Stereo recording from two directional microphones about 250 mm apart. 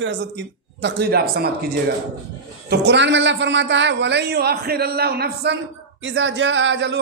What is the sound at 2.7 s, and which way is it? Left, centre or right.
A man's voice, right.